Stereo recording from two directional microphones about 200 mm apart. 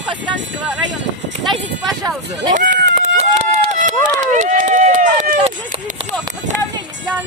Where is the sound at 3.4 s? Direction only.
30° right (ahead or behind).